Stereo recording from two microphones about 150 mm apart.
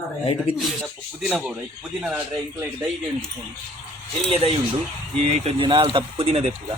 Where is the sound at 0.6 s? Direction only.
Centre (ahead or behind).